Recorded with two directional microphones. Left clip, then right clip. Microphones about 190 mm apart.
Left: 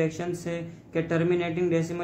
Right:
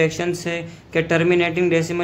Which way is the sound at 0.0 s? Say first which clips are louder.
Right 8 dB; 45° right (ahead or behind).